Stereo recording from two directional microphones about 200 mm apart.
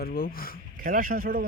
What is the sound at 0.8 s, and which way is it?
Speech, 45° right (ahead or behind).